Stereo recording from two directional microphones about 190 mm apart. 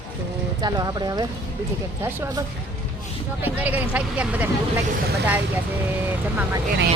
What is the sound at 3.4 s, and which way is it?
Speech, 10° right (ahead or behind).